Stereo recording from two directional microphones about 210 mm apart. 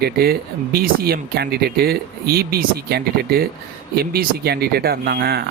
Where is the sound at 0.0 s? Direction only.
45° right (ahead or behind).